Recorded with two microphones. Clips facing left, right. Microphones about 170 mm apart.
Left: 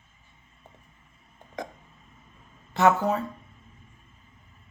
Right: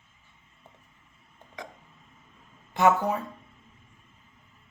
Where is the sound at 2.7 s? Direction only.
15° right (ahead or behind).